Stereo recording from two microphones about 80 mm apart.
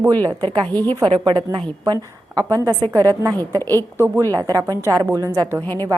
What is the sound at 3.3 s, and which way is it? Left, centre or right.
A woman's voice, right.